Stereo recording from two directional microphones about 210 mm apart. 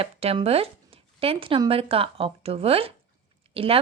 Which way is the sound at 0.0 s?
30° right (ahead or behind).